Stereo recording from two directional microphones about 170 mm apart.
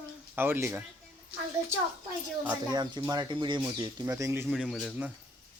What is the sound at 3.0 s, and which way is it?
Speech, 25° right (ahead or behind).